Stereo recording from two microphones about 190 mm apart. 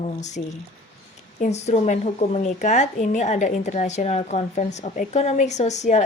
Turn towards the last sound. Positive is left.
turn(degrees=35)  # may be behind; listen again after turning